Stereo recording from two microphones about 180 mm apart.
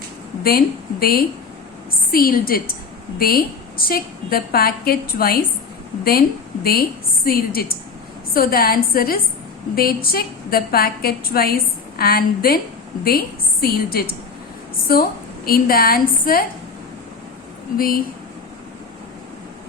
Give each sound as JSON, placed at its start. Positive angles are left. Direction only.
{"t": 0.4, "sound": "a woman's voice", "side_deg": 55}
{"t": 15.4, "sound": "a woman's voice", "side_deg": 55}
{"t": 17.7, "sound": "speech", "side_deg": 55}